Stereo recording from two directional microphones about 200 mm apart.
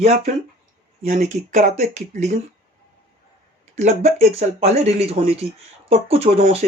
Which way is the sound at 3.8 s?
35° right (ahead or behind).